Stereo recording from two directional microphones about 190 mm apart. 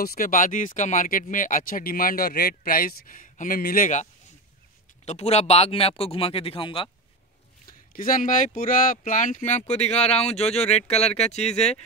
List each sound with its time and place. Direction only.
0.0 s speech: 50° left (ahead or behind); by 6.9 s 30° left (ahead or behind)
7.9 s speech: 45° left (ahead or behind)